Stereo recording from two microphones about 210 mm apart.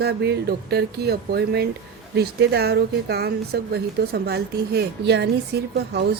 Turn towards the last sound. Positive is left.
turn(degrees=-50)  # may be behind; listen again after turning